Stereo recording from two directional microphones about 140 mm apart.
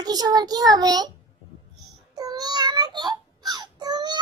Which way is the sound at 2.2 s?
30° right (ahead or behind).